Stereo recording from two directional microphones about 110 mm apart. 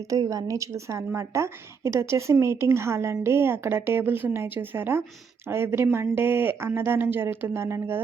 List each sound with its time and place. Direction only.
0.1 s a woman's voice: 30° right (ahead or behind)